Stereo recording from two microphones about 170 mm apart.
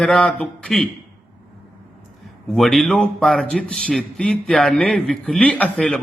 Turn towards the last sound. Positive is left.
turn(degrees=10)  # may be behind; listen again after turning